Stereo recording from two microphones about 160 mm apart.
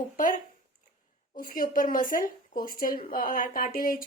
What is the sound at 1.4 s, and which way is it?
A woman's voice, 60° left (ahead or behind).